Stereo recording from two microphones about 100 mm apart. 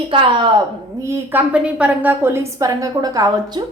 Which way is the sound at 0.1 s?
60° right (ahead or behind).